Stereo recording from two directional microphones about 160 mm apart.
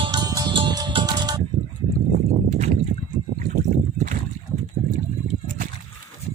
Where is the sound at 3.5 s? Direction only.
55° right (ahead or behind).